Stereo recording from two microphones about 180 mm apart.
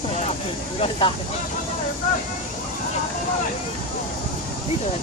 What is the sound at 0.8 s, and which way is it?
Speech, 30° left (ahead or behind).